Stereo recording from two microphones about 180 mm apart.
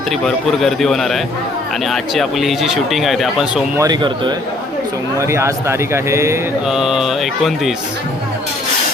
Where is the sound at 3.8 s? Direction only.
25° right (ahead or behind).